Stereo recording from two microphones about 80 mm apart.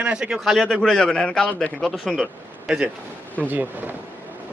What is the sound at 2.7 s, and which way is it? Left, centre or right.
Speech, centre.